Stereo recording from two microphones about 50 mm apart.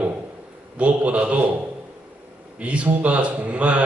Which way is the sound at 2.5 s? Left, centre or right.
Right.